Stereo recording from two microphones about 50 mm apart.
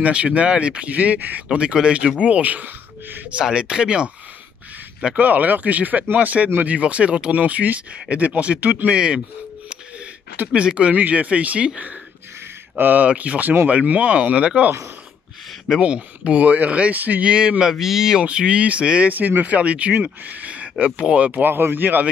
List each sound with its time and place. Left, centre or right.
0.0 s speech: right
1.6 s speech: right
3.5 s speech: right
8.9 s speech: centre
10.5 s speech: right
12.7 s speech: right
15.8 s speech: right
18.2 s speech: centre
19.1 s speech: right